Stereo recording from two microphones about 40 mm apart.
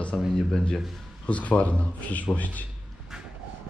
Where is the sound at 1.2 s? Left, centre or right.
Left.